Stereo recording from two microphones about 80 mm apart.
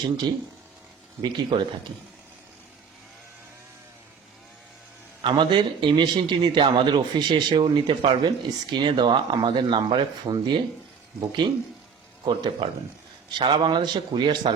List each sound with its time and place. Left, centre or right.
1.2 s speech: right
5.2 s a man's voice: right
8.4 s speech: right